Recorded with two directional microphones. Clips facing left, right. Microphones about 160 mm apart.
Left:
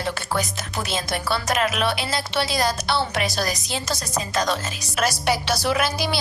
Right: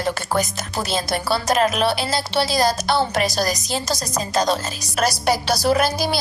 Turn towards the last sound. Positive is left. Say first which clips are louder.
# right 4 dB
turn(degrees=-40)  # may be behind; listen again after turning